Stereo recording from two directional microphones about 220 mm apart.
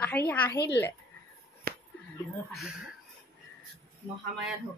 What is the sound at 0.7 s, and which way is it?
Speech, 55° left (ahead or behind).